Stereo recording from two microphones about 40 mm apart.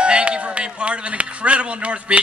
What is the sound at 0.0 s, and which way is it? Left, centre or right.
A man's voice, right.